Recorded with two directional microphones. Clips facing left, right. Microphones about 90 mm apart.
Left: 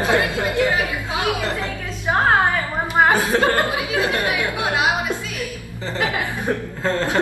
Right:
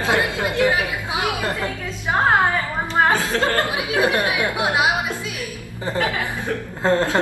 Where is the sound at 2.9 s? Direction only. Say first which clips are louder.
Left 2 dB; 15° left (ahead or behind).